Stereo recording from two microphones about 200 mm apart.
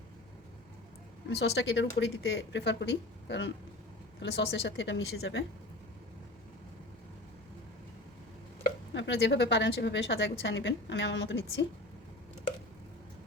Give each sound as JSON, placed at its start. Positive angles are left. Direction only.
{"t": 1.3, "sound": "a woman's voice", "side_deg": 55}
{"t": 8.9, "sound": "a woman's voice", "side_deg": 65}